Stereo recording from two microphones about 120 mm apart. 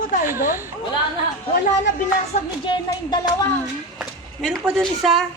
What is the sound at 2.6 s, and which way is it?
Speech, 35° left (ahead or behind).